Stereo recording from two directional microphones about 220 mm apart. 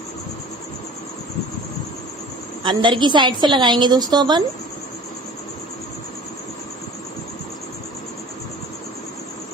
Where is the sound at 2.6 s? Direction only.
20° right (ahead or behind).